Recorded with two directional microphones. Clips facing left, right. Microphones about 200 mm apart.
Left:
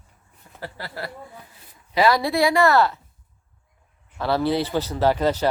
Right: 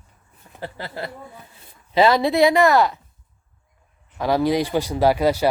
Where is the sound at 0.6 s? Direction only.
20° right (ahead or behind).